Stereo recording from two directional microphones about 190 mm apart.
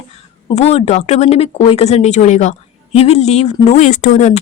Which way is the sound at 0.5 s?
35° left (ahead or behind).